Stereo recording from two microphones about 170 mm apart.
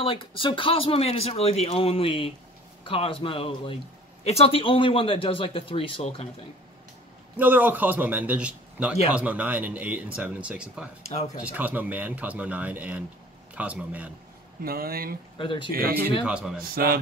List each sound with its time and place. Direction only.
0.0 s speech: 30° left (ahead or behind)
7.3 s speech: 10° right (ahead or behind)
11.0 s speech: 40° left (ahead or behind)
11.4 s speech: 10° right (ahead or behind)
14.6 s speech: 60° right (ahead or behind)
15.3 s speech: 30° left (ahead or behind)
15.7 s speech: 65° right (ahead or behind)
16.3 s speech: 5° right (ahead or behind)
16.7 s speech: 60° right (ahead or behind)